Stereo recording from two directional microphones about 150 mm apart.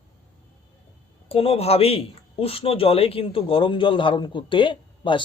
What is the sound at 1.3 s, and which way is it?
Speech, 40° left (ahead or behind).